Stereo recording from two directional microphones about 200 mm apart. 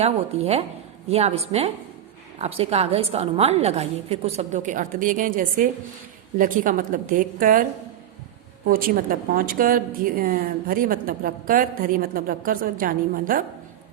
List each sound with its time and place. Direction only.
0.0 s a woman's voice: 30° right (ahead or behind)
9.0 s a woman's voice: 45° right (ahead or behind)